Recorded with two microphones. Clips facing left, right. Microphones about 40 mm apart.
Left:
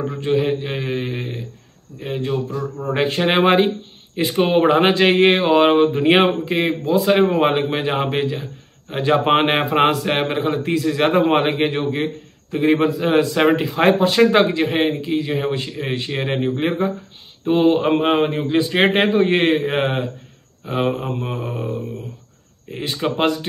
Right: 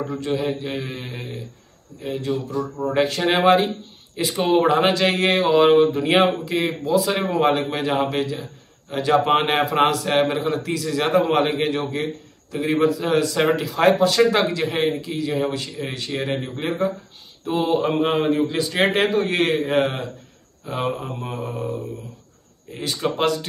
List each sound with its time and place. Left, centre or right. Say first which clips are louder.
0.1 s a man's voice: left 6 dB; left
5.9 s a man's voice: left 3 dB; left
20.6 s a man's voice: left 4 dB; centre
22.7 s a man's voice: left 2 dB; left